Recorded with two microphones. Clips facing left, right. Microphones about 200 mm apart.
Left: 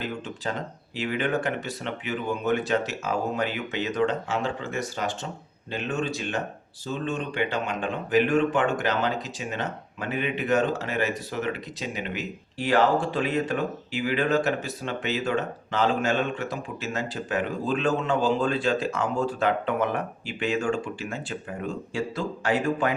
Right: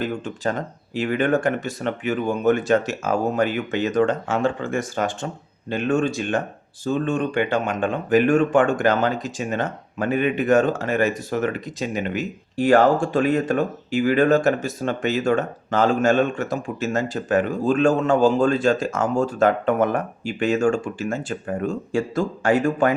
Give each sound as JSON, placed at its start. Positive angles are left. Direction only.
{"t": 0.0, "sound": "speech", "side_deg": -45}